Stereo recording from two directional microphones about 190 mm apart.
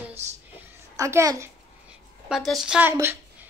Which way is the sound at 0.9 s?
15° right (ahead or behind).